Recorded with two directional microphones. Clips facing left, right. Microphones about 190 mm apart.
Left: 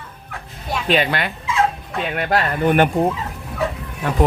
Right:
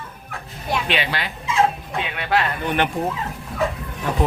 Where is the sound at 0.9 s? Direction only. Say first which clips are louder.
Left 6 dB; 50° left (ahead or behind).